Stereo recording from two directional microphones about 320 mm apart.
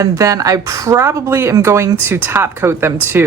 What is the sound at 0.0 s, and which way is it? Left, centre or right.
Speech, centre.